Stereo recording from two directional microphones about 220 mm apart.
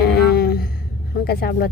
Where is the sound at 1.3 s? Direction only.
45° left (ahead or behind).